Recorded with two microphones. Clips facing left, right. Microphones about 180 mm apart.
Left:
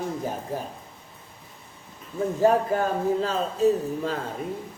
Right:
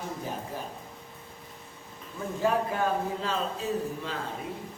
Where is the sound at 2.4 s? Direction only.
40° left (ahead or behind).